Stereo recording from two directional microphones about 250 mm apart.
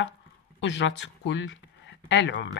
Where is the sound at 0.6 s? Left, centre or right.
Left.